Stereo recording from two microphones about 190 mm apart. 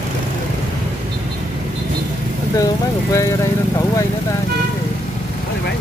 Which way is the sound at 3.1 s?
15° left (ahead or behind).